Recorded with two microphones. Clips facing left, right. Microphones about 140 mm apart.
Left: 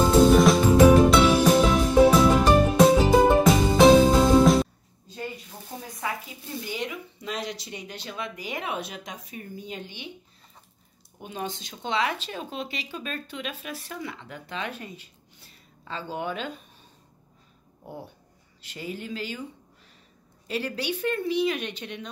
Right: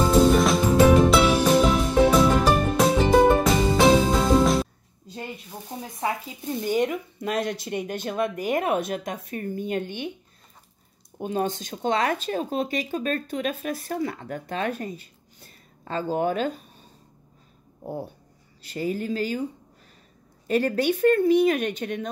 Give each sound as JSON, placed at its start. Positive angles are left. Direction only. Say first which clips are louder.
{"t": 0.0, "sound": "music", "louder": "left 1 dB", "side_deg": 0}
{"t": 5.7, "sound": "frying", "louder": "right 3 dB", "side_deg": -20}
{"t": 6.6, "sound": "speech", "louder": "right 10 dB", "side_deg": -50}
{"t": 11.1, "sound": "speech", "louder": "right 8 dB", "side_deg": -40}
{"t": 17.8, "sound": "speech", "louder": "right 7 dB", "side_deg": -40}
{"t": 20.4, "sound": "speech", "louder": "right 8 dB", "side_deg": -50}